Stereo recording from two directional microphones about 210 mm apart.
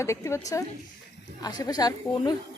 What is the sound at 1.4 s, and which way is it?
Speech, 20° left (ahead or behind).